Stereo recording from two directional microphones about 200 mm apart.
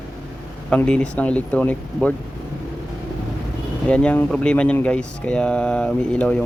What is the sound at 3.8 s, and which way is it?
Speech, 5° left (ahead or behind).